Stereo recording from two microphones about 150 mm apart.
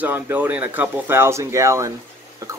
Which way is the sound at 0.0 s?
10° right (ahead or behind).